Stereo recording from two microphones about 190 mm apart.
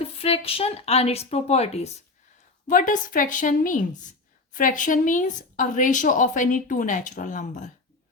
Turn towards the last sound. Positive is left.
turn(degrees=40)  # may be behind; listen again after turning